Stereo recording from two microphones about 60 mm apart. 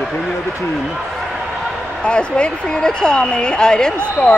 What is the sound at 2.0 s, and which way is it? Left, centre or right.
Speech, centre.